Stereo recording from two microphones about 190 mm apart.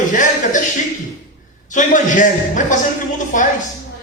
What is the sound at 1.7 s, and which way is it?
A man's voice, 40° left (ahead or behind).